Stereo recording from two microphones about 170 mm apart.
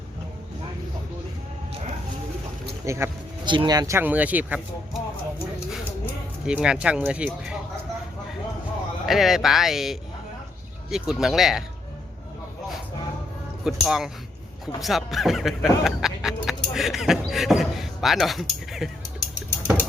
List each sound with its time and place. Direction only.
2.8 s speech: 15° right (ahead or behind)
3.4 s speech: 30° right (ahead or behind); by 4.6 s 10° right (ahead or behind)
6.4 s speech: 5° right (ahead or behind)
9.0 s speech: centre (ahead or behind)
13.7 s speech: centre (ahead or behind)